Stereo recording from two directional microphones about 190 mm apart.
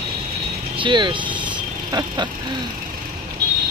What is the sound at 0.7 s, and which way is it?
Vehicle, 25° right (ahead or behind).